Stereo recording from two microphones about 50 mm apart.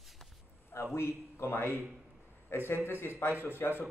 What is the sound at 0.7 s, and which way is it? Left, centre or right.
A man's voice, left.